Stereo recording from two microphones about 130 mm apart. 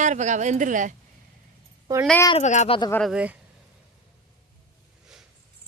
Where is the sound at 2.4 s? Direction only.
60° left (ahead or behind).